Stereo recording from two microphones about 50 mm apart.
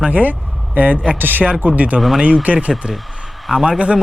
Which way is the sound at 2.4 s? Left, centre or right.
Right.